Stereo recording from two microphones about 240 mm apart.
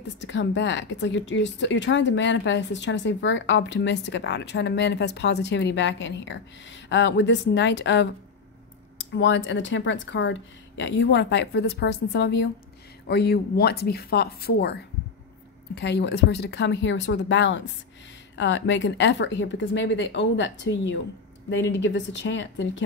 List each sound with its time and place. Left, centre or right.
0.2 s speech: left
9.1 s speech: left